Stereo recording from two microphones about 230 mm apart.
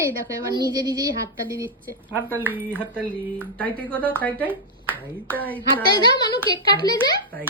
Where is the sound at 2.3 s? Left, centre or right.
Centre.